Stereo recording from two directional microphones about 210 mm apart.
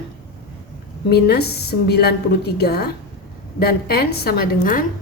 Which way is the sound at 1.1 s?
50° left (ahead or behind).